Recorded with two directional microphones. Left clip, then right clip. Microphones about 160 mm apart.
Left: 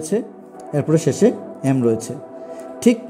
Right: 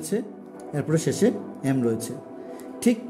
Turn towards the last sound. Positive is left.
turn(degrees=30)  # may be behind; listen again after turning